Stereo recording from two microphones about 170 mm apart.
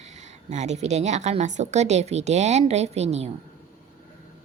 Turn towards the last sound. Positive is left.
turn(degrees=-40)  # may be behind; listen again after turning